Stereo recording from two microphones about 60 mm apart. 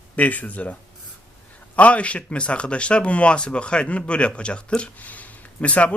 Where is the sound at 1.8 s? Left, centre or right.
Left.